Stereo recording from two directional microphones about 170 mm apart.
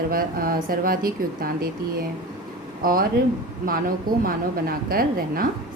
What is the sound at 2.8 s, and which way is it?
A woman's voice, 55° right (ahead or behind).